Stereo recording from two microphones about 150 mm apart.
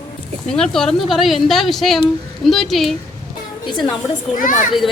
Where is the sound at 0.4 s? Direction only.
5° left (ahead or behind).